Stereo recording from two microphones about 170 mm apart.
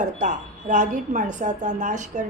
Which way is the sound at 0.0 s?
45° right (ahead or behind).